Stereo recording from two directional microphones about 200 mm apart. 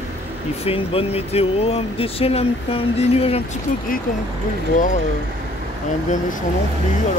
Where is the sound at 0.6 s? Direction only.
30° left (ahead or behind).